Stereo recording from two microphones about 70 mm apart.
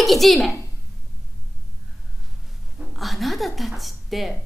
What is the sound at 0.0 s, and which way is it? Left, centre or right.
Speech, centre.